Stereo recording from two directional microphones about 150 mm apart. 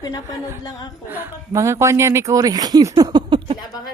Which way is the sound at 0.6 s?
30° left (ahead or behind).